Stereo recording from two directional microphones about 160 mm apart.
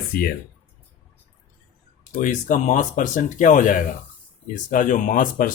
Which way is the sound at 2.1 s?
50° left (ahead or behind).